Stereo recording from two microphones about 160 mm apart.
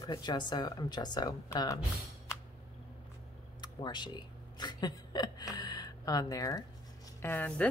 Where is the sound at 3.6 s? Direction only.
30° left (ahead or behind).